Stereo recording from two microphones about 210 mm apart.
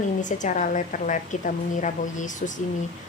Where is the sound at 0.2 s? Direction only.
35° left (ahead or behind).